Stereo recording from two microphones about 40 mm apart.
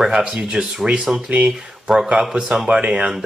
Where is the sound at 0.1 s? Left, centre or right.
Right.